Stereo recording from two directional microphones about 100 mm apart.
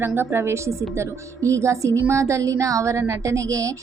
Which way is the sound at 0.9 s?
30° right (ahead or behind).